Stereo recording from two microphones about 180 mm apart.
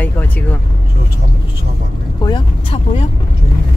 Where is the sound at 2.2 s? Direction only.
25° left (ahead or behind).